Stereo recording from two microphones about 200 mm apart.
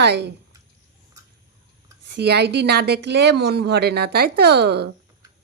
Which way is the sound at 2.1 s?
55° right (ahead or behind).